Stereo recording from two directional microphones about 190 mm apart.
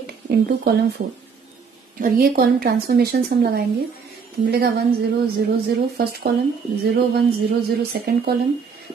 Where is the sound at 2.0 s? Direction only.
50° right (ahead or behind).